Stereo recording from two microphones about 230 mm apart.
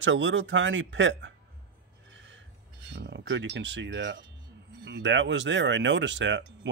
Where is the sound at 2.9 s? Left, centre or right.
Right.